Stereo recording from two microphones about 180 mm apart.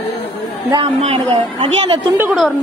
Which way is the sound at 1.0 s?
35° right (ahead or behind).